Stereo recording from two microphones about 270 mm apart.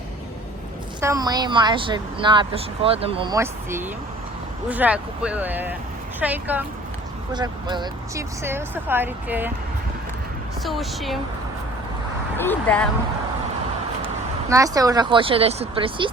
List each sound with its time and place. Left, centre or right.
1.0 s speech: centre
10.6 s a woman's voice: centre
12.4 s speech: centre
14.5 s speech: centre